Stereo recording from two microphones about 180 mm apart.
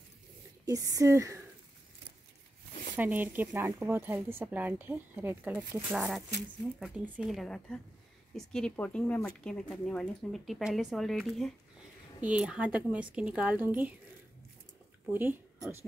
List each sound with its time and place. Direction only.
0.7 s speech: 20° right (ahead or behind)
3.0 s speech: 10° right (ahead or behind)
15.0 s speech: 10° right (ahead or behind)